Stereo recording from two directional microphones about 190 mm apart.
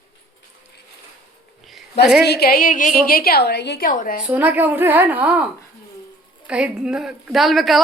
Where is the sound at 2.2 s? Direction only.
60° left (ahead or behind).